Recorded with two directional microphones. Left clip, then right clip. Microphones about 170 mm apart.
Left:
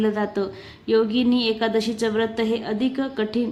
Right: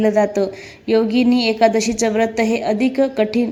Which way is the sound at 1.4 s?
20° right (ahead or behind).